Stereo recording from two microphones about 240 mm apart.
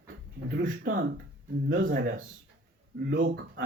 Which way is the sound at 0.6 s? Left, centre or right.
Right.